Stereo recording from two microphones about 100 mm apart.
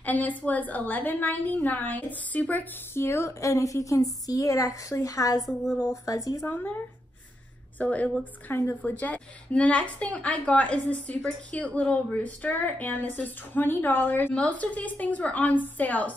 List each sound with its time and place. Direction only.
0.0 s a woman's voice: 15° left (ahead or behind); by 5.4 s 35° left (ahead or behind)
5.4 s a woman's voice: 5° right (ahead or behind)
6.0 s speech: 35° left (ahead or behind)
6.4 s a woman's voice: 20° left (ahead or behind)
7.8 s a woman's voice: 15° left (ahead or behind)